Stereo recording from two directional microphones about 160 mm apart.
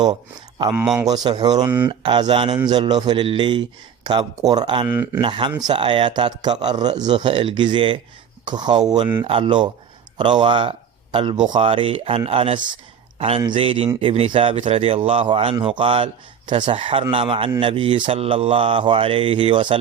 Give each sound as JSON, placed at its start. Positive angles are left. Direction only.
{"t": 0.7, "sound": "a man's voice", "side_deg": -10}
{"t": 1.0, "sound": "a man's voice", "side_deg": -25}
{"t": 1.6, "sound": "a man's voice", "side_deg": -10}
{"t": 1.9, "sound": "a man's voice", "side_deg": -30}
{"t": 4.9, "sound": "a man's voice", "side_deg": -10}
{"t": 5.2, "sound": "a man's voice", "side_deg": -30}